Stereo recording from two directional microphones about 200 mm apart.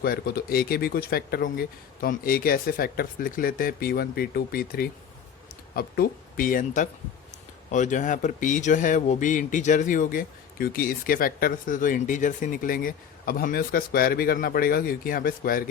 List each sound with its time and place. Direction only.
0.0 s speech: 50° left (ahead or behind)